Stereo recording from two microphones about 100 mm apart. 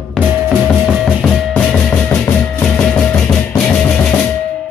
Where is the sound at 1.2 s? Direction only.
5° left (ahead or behind).